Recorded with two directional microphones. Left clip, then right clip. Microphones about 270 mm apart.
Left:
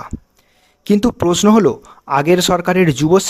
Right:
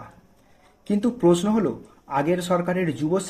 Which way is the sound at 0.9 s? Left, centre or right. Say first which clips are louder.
Left 5 dB; left.